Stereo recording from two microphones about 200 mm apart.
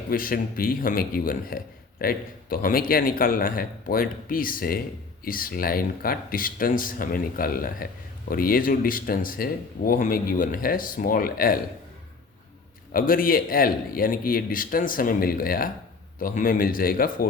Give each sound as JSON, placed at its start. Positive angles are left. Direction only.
{"t": 0.1, "sound": "speech", "side_deg": 45}
{"t": 12.9, "sound": "speech", "side_deg": 45}